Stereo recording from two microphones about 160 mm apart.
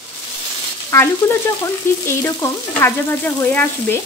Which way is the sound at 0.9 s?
15° left (ahead or behind).